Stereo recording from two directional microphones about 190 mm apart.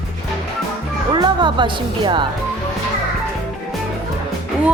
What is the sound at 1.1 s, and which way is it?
Speech, 25° right (ahead or behind).